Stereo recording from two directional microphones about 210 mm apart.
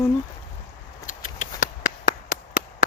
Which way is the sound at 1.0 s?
40° left (ahead or behind).